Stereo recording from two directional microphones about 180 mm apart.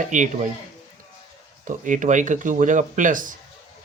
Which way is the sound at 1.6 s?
45° right (ahead or behind).